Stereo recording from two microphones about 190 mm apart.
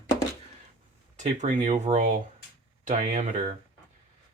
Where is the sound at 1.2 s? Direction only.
40° right (ahead or behind).